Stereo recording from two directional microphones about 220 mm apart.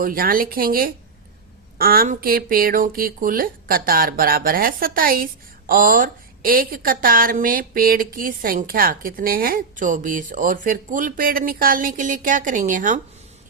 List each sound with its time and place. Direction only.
0.0 s speech: 40° right (ahead or behind)